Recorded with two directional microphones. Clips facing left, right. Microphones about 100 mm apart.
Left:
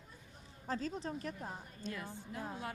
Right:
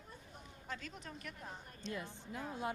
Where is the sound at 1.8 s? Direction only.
20° right (ahead or behind).